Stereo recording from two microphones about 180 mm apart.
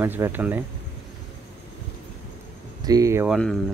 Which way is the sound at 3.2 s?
Centre (ahead or behind).